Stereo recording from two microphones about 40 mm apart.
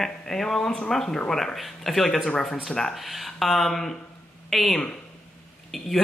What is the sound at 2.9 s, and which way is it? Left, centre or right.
Speech, centre.